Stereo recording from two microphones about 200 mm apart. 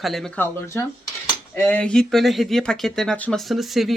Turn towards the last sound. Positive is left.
turn(degrees=0)  # may be behind; listen again after turning